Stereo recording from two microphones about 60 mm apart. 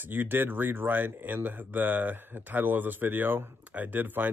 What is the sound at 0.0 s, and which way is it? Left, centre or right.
Speech, right.